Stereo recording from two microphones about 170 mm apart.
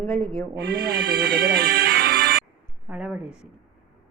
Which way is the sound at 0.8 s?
65° right (ahead or behind).